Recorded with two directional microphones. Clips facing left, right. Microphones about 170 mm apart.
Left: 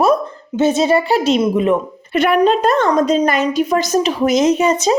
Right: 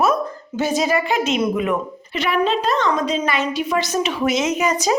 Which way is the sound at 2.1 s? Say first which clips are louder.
Left 7 dB; 50° left (ahead or behind).